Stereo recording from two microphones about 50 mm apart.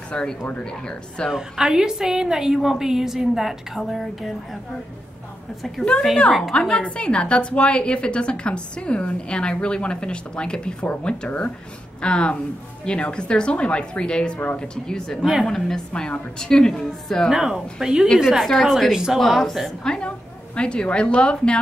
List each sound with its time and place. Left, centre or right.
0.1 s a woman's voice: centre
1.3 s a woman's voice: centre
6.5 s a woman's voice: centre
17.3 s a woman's voice: centre
19.1 s a woman's voice: centre
19.8 s a woman's voice: centre